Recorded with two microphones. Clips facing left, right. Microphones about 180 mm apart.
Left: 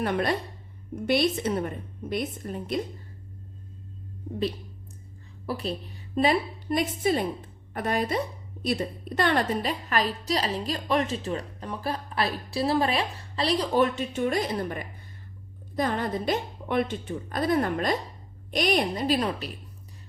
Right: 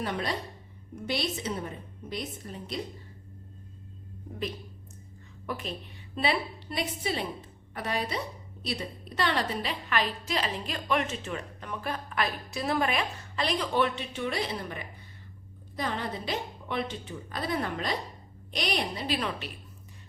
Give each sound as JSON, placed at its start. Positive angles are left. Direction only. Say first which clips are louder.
{"t": 0.0, "sound": "a woman's voice", "louder": "left 6 dB", "side_deg": 55}
{"t": 5.5, "sound": "a woman's voice", "louder": "left 5 dB", "side_deg": 35}